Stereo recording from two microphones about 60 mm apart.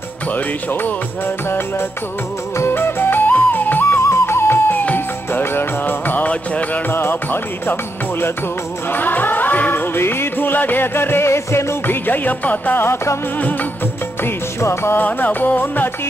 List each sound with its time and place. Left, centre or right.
0.3 s music: left
4.0 s music: left
6.9 s music: left
8.9 s music: left
11.8 s music: left
14.6 s music: left
15.0 s music: left